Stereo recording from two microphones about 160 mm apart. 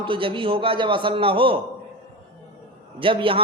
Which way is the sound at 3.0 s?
35° right (ahead or behind).